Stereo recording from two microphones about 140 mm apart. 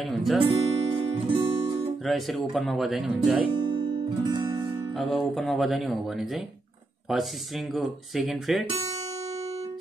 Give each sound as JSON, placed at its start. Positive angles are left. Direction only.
{"t": 0.0, "sound": "speech", "side_deg": 0}
{"t": 0.4, "sound": "music", "side_deg": -40}
{"t": 2.0, "sound": "speech", "side_deg": 0}
{"t": 3.4, "sound": "guitar", "side_deg": -35}
{"t": 4.2, "sound": "music", "side_deg": -30}
{"t": 4.9, "sound": "speech", "side_deg": 0}